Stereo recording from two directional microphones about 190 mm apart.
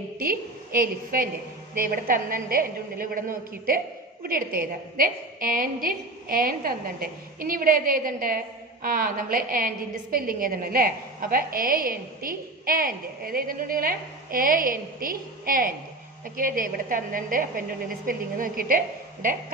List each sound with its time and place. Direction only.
0.2 s a woman's voice: 50° right (ahead or behind)